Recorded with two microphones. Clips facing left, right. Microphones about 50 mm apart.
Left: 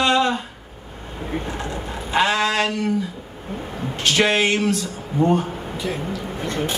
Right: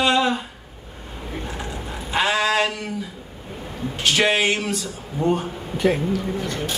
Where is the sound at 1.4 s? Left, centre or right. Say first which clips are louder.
Left 3 dB; centre.